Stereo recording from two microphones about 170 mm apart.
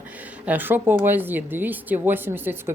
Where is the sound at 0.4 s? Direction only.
10° right (ahead or behind).